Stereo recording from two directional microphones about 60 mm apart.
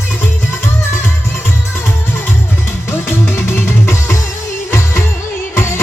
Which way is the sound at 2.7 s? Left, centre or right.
Left.